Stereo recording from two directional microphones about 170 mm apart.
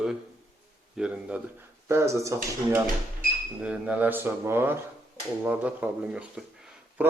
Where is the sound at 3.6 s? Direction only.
10° right (ahead or behind).